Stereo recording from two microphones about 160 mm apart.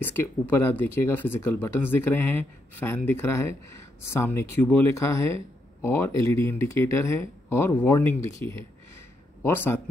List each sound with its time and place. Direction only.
0.0 s speech: 15° left (ahead or behind)